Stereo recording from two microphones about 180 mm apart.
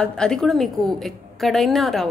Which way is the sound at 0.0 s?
5° left (ahead or behind).